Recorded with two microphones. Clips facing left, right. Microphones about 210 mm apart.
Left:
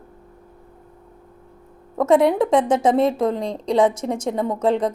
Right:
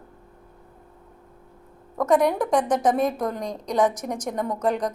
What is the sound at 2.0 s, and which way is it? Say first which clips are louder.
A woman's voice: left 4 dB; 25° left (ahead or behind).